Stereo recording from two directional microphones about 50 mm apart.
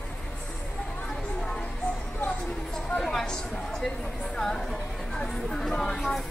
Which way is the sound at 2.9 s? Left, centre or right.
Centre.